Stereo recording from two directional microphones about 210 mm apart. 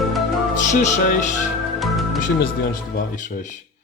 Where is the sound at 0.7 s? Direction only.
35° left (ahead or behind).